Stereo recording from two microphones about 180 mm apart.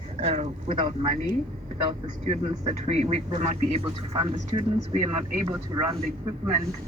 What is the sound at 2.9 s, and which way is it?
Speech, 35° right (ahead or behind).